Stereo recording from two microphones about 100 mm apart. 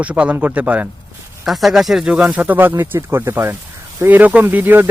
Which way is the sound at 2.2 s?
15° right (ahead or behind).